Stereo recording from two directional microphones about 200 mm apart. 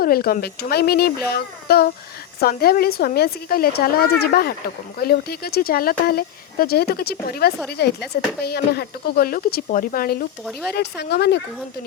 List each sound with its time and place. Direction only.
0.0 s speech: 45° left (ahead or behind)